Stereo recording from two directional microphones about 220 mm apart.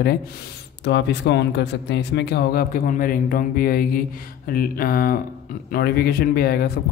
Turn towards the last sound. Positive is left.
turn(degrees=45)  # may be behind; listen again after turning